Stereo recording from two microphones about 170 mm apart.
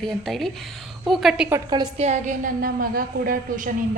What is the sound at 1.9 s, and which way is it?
A woman's voice, 40° right (ahead or behind).